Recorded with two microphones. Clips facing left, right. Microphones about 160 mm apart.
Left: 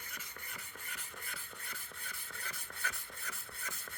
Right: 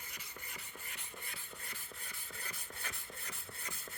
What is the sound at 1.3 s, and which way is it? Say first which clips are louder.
Rub: left 1 dB; 20° right (ahead or behind).